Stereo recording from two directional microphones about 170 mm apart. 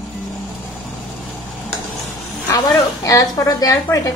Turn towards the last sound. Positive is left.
turn(degrees=20)  # may be behind; listen again after turning